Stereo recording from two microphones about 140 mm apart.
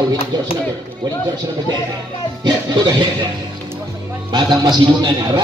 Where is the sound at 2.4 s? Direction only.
30° right (ahead or behind).